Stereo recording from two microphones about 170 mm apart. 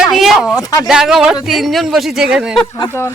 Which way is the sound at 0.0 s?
Centre (ahead or behind).